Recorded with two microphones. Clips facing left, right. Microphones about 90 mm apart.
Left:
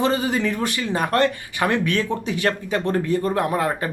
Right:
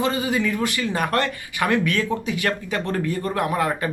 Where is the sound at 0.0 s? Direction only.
40° left (ahead or behind).